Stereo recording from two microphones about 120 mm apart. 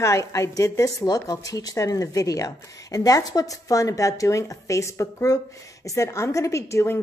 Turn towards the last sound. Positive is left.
turn(degrees=25)  # may be behind; listen again after turning